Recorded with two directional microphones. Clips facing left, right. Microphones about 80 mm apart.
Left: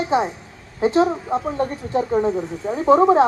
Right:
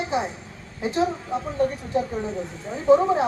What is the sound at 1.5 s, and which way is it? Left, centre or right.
Speech, left.